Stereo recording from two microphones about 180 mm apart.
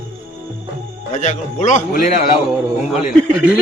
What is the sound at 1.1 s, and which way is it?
Speech, 40° left (ahead or behind).